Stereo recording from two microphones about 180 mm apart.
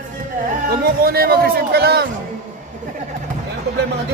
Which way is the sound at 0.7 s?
55° right (ahead or behind).